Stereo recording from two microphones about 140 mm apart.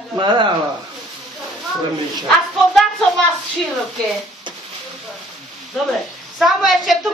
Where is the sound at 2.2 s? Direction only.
Centre (ahead or behind).